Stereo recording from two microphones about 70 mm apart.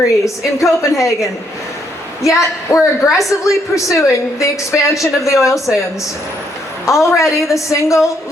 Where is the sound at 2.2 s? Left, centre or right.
Left.